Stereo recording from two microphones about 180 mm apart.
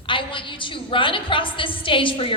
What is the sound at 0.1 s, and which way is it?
A woman's voice, 30° left (ahead or behind).